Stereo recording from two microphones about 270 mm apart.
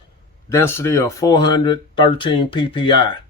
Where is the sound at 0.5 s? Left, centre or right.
Centre.